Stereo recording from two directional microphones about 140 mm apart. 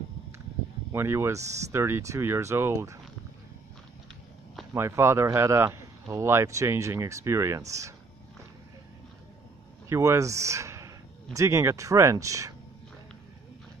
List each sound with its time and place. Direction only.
0.9 s speech: 20° right (ahead or behind)
4.7 s speech: 20° right (ahead or behind)
9.8 s speech: 20° right (ahead or behind)